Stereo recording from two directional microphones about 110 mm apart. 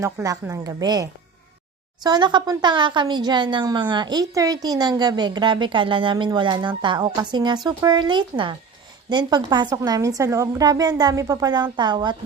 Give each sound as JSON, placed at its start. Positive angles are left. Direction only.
{"t": 0.0, "sound": "a woman's voice", "side_deg": -30}
{"t": 2.0, "sound": "a woman's voice", "side_deg": -40}